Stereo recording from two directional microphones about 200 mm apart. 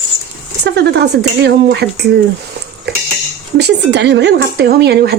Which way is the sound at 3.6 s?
60° right (ahead or behind).